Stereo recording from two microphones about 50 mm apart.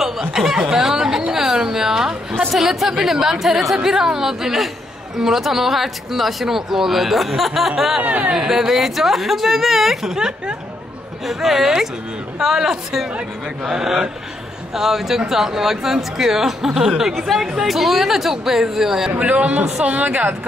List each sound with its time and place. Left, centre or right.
0.0 s snicker: centre
1.3 s a sound: centre
2.5 s speech: centre
8.0 s speech: right
8.5 s speech: centre
19.1 s a woman's voice: right